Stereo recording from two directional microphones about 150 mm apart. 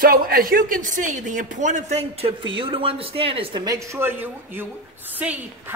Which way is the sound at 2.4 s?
35° right (ahead or behind).